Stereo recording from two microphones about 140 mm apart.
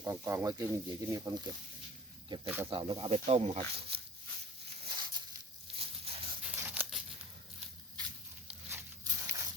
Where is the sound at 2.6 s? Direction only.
40° right (ahead or behind).